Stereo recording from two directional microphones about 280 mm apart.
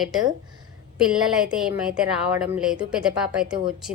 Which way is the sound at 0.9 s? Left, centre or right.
Centre.